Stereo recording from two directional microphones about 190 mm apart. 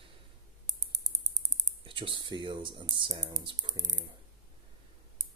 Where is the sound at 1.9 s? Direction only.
25° right (ahead or behind).